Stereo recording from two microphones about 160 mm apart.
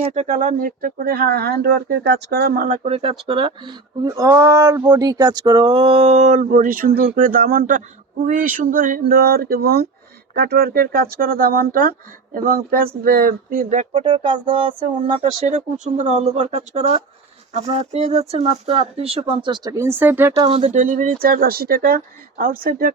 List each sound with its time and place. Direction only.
0.1 s speech: 45° right (ahead or behind)
2.8 s speech: 35° right (ahead or behind)
14.0 s speech: 30° right (ahead or behind)
15.2 s speech: 50° right (ahead or behind); by 20.3 s 15° right (ahead or behind)
20.3 s speech: 40° right (ahead or behind); by 22.9 s 65° right (ahead or behind)